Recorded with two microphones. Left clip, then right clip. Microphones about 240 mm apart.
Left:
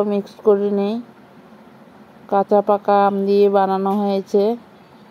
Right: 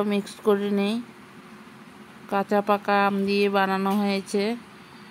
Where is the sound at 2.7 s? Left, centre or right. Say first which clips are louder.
Left 7 dB; centre.